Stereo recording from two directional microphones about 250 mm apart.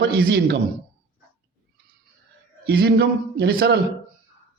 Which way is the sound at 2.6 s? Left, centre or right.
Right.